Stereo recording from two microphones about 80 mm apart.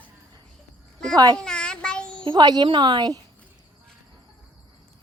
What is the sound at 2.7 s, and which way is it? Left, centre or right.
Speech, right.